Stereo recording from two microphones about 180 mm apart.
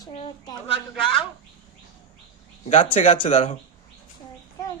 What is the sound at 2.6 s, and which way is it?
Speech, 35° left (ahead or behind).